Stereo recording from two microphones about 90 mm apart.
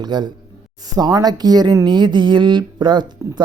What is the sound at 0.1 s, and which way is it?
Speech, 50° right (ahead or behind).